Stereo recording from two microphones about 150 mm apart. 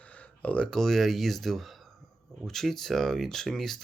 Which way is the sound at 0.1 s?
10° left (ahead or behind).